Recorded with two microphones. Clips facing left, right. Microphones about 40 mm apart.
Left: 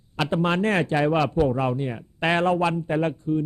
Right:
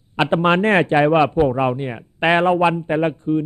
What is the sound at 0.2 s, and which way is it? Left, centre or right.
Speech, right.